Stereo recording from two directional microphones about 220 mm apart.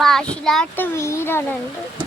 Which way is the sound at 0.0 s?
5° left (ahead or behind).